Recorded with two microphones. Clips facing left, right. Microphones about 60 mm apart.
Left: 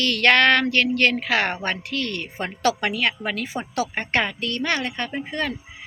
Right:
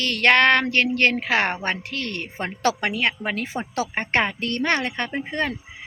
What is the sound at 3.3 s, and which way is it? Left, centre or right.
Speech, right.